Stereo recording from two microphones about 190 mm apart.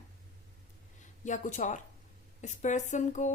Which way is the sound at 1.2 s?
40° left (ahead or behind).